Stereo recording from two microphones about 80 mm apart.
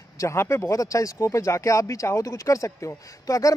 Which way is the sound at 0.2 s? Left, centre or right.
Left.